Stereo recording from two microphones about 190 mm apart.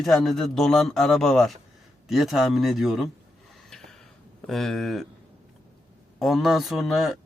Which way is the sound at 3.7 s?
Centre (ahead or behind).